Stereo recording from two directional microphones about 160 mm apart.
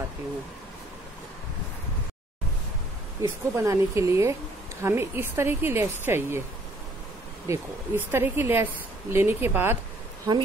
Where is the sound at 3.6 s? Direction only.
20° right (ahead or behind).